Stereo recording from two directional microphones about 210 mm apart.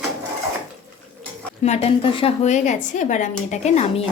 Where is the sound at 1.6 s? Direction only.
30° left (ahead or behind).